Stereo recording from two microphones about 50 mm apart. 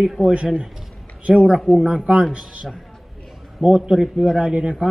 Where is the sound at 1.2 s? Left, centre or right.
Right.